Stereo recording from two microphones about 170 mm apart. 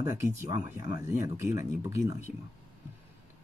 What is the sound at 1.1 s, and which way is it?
Speech, 15° right (ahead or behind).